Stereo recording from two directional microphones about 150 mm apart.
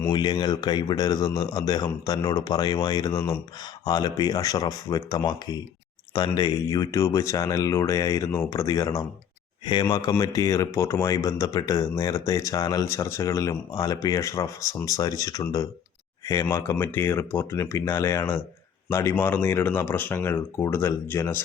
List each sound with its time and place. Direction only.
0.1 s a man's voice: 30° left (ahead or behind)